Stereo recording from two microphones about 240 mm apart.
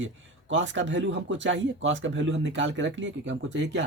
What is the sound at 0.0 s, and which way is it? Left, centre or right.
Speech, right.